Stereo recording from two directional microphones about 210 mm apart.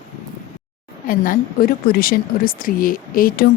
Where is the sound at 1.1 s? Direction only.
40° left (ahead or behind).